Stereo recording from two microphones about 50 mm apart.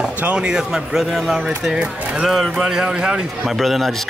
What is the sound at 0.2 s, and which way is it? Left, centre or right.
Speech, centre.